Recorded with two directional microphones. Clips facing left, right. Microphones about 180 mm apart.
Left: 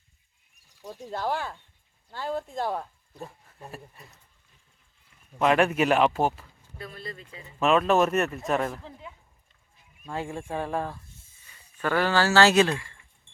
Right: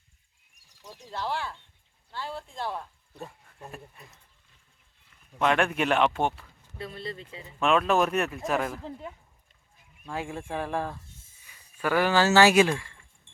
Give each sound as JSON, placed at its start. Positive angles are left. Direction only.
{"t": 0.9, "sound": "speech", "side_deg": 45}
{"t": 3.2, "sound": "speech", "side_deg": 5}
{"t": 5.4, "sound": "speech", "side_deg": 5}
{"t": 6.7, "sound": "speech", "side_deg": -25}
{"t": 7.6, "sound": "speech", "side_deg": 0}
{"t": 10.3, "sound": "speech", "side_deg": 5}
{"t": 11.4, "sound": "speech", "side_deg": -10}